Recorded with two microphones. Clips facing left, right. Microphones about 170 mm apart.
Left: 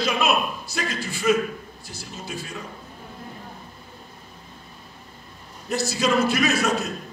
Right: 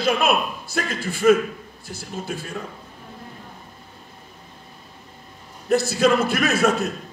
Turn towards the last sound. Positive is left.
turn(degrees=-55)  # may be behind; listen again after turning